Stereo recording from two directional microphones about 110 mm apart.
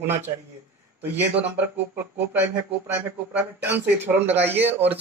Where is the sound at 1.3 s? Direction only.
15° right (ahead or behind).